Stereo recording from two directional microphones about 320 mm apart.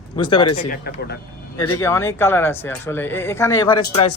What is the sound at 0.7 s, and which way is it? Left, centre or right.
Speech, left.